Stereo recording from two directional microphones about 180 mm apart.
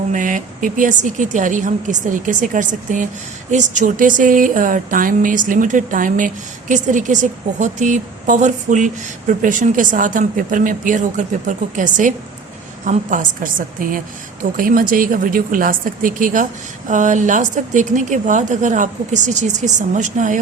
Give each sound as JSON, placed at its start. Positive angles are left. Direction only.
{"t": 0.1, "sound": "speech", "side_deg": -45}